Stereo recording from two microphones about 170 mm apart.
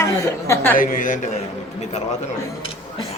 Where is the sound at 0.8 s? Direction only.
50° left (ahead or behind).